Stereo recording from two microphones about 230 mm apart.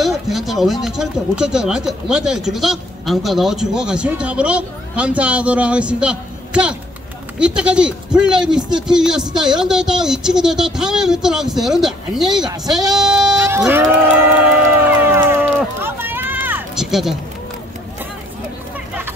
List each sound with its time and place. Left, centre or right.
0.0 s speech: centre
12.9 s bleat: centre
14.9 s run: centre